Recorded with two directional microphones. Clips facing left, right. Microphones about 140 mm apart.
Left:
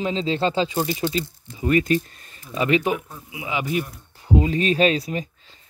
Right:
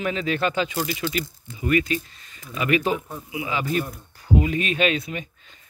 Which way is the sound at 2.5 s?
30° left (ahead or behind).